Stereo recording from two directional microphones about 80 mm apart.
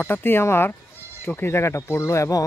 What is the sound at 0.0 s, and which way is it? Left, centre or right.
Speech, left.